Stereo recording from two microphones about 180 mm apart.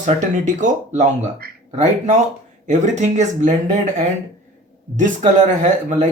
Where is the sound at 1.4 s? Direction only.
55° right (ahead or behind).